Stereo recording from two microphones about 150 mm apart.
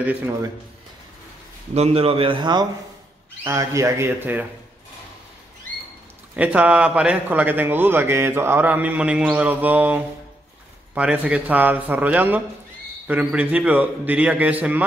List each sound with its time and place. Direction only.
0.0 s a man's voice: 10° right (ahead or behind)
1.7 s a man's voice: 40° right (ahead or behind)
3.4 s a man's voice: 20° right (ahead or behind)
6.3 s a man's voice: 10° right (ahead or behind)